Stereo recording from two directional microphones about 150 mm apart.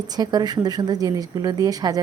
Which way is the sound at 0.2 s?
25° right (ahead or behind).